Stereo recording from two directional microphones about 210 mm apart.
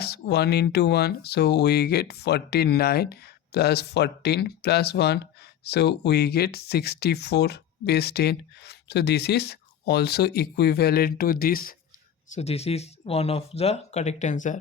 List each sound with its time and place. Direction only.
0.0 s speech: 50° left (ahead or behind)
12.3 s speech: 30° left (ahead or behind)